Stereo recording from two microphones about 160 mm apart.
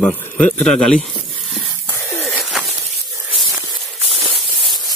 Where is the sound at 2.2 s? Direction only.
Centre (ahead or behind).